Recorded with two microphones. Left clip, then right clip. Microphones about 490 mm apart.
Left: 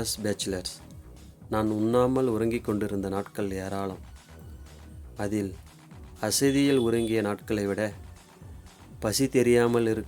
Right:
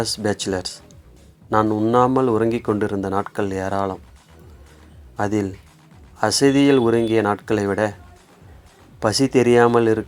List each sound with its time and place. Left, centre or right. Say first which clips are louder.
0.0 s a man's voice: right 8 dB; left
5.1 s a man's voice: right 9 dB; left
9.0 s a man's voice: right 8 dB; left